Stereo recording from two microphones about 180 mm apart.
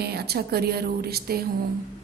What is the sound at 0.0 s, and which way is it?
A woman's voice, 60° right (ahead or behind).